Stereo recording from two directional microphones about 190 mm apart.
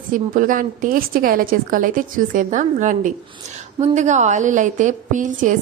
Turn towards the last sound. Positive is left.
turn(degrees=-40)  # may be behind; listen again after turning